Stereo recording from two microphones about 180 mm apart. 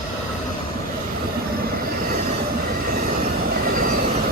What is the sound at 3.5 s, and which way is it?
Train, 50° right (ahead or behind).